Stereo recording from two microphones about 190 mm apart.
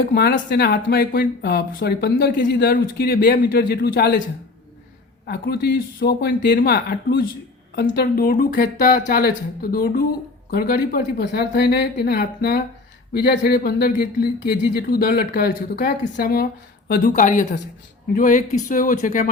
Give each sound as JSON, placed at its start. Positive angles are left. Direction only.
{"t": 0.0, "sound": "speech", "side_deg": 55}
{"t": 5.2, "sound": "speech", "side_deg": 60}